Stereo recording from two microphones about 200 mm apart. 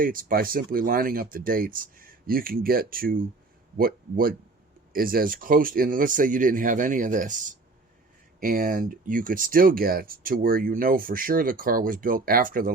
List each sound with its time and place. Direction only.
0.0 s speech: 45° right (ahead or behind)
8.4 s speech: 45° right (ahead or behind)